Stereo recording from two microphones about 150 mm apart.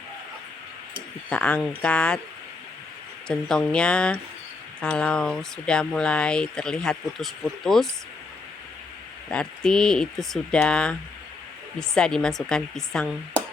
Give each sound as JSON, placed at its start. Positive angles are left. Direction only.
{"t": 1.3, "sound": "speech", "side_deg": 10}
{"t": 3.2, "sound": "speech", "side_deg": 5}
{"t": 9.3, "sound": "speech", "side_deg": 5}